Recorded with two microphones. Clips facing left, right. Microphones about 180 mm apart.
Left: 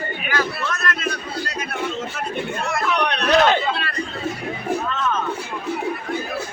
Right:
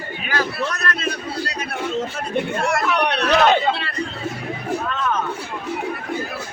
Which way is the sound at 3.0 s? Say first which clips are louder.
Even; 20° right (ahead or behind).